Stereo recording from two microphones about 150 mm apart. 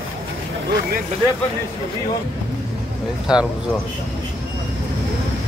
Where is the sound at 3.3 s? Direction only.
5° right (ahead or behind).